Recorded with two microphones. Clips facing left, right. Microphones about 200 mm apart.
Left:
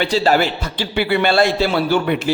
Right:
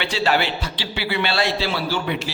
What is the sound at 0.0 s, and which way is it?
A man's voice, 40° left (ahead or behind).